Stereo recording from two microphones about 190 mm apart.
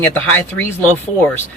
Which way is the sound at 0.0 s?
10° left (ahead or behind).